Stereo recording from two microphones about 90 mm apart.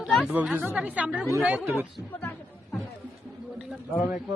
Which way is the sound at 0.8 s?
15° right (ahead or behind).